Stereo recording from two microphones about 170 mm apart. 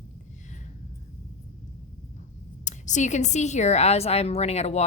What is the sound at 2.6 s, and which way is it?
A woman's voice, 45° left (ahead or behind).